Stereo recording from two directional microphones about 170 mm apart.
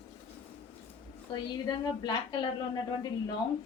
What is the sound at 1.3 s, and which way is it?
A woman's voice, 30° left (ahead or behind).